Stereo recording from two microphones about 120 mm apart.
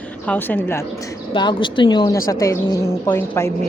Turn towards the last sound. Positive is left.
turn(degrees=20)  # may be behind; listen again after turning